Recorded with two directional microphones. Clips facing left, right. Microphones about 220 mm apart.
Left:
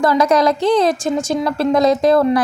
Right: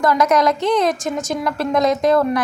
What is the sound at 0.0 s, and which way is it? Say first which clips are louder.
A woman's voice: left 2 dB; 30° left (ahead or behind).